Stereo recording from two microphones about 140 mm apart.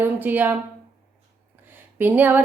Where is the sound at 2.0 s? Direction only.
10° right (ahead or behind).